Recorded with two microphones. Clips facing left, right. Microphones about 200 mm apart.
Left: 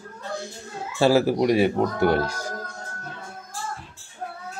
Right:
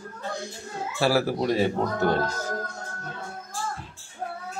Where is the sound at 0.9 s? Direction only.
20° left (ahead or behind).